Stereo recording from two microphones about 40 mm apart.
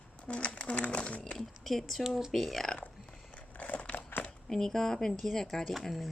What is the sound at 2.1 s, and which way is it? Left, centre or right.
Speech, centre.